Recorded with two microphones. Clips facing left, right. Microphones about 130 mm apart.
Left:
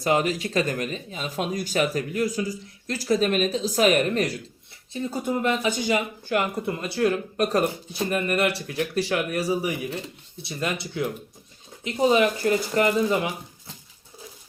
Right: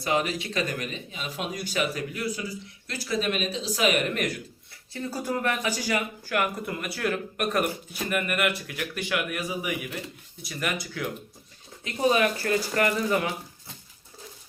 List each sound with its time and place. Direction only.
0.0 s speech: 40° left (ahead or behind)
4.9 s speech: 20° left (ahead or behind)